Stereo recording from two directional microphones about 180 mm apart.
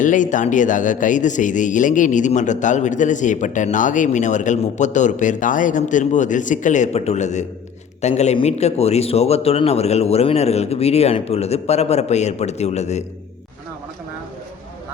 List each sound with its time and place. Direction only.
0.0 s a man's voice: 45° left (ahead or behind)